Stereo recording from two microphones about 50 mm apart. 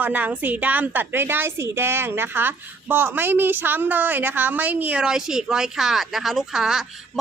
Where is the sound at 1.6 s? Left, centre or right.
Right.